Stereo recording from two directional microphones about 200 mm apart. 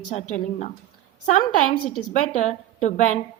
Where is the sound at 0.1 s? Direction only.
35° left (ahead or behind).